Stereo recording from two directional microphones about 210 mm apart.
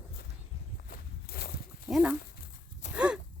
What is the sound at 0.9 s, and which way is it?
Walk, 45° left (ahead or behind).